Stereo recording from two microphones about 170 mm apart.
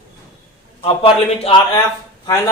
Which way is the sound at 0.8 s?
30° left (ahead or behind).